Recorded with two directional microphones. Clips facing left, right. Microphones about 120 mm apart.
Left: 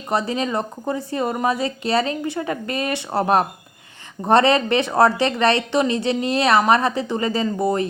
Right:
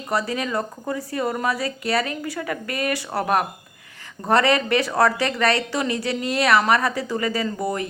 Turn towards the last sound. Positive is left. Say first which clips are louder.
# left 4 dB
turn(degrees=25)  # may be behind; listen again after turning